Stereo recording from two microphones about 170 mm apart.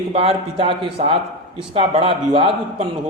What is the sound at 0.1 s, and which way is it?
A man's voice, 35° right (ahead or behind).